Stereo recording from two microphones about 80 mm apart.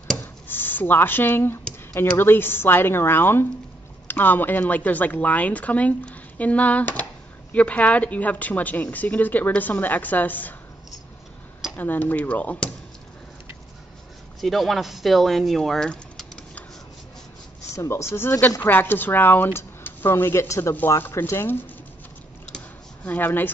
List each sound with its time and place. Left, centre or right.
0.2 s a woman's voice: left
11.7 s a woman's voice: left
14.4 s speech: centre
15.9 s typing: centre
17.7 s a woman's voice: left
23.0 s a woman's voice: left